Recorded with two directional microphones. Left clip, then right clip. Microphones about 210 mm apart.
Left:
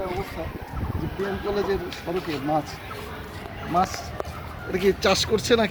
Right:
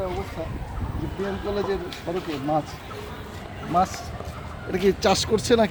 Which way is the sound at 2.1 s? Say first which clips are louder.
Even; 10° left (ahead or behind).